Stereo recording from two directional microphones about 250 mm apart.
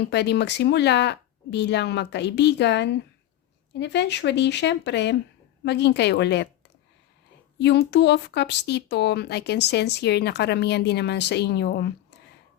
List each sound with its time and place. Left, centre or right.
0.0 s speech: left
7.6 s speech: left